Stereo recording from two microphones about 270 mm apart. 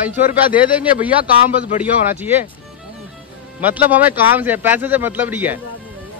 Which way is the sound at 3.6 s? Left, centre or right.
Centre.